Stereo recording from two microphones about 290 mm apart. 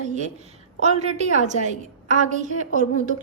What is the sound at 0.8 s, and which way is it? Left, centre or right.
A woman's voice, right.